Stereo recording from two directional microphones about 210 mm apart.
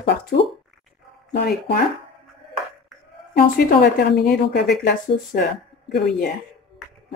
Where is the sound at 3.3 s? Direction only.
45° left (ahead or behind).